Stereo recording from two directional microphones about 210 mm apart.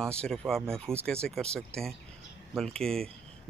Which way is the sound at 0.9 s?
10° right (ahead or behind).